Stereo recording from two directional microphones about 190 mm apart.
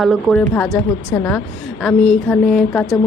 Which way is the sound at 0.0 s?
Centre (ahead or behind).